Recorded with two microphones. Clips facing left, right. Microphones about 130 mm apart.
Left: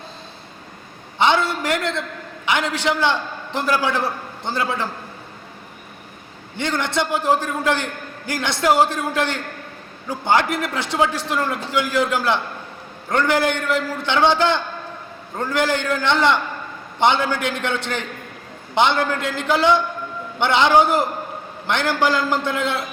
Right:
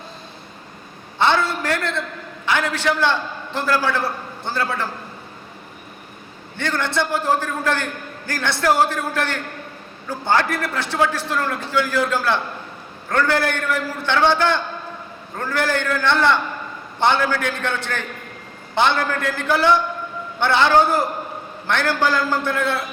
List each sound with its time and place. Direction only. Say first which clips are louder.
1.2 s a man's voice: left 1 dB; 15° left (ahead or behind)
6.6 s a man's voice: even; 15° left (ahead or behind)